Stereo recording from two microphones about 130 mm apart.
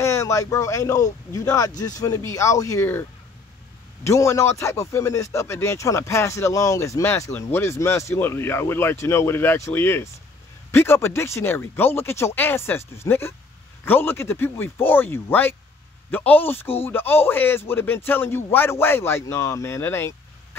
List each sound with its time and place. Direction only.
0.0 s speech: 25° left (ahead or behind)